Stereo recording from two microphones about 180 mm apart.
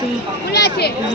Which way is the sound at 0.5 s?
65° left (ahead or behind).